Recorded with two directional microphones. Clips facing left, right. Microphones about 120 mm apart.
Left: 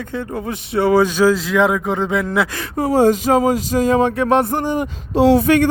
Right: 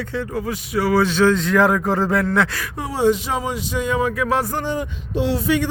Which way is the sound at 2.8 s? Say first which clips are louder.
Left 5 dB; 45° left (ahead or behind).